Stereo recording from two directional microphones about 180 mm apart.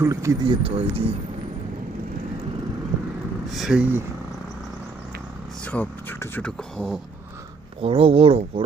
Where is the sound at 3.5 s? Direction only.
5° right (ahead or behind).